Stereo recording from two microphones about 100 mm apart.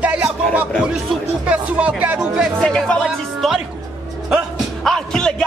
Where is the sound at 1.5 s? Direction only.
15° right (ahead or behind).